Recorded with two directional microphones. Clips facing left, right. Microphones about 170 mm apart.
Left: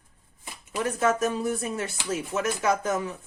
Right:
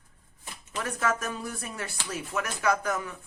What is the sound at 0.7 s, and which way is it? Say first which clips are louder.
Speech: left 5 dB; 20° left (ahead or behind).